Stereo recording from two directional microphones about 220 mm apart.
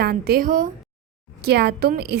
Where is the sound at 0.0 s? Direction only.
45° right (ahead or behind).